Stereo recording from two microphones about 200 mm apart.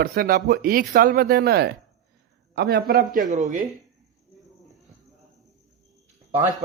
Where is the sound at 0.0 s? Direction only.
50° right (ahead or behind).